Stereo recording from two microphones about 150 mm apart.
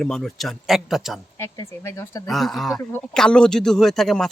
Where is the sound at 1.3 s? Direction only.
20° left (ahead or behind).